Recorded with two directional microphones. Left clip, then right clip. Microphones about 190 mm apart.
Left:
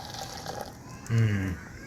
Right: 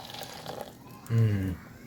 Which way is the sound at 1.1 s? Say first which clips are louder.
Left 1 dB; 25° right (ahead or behind).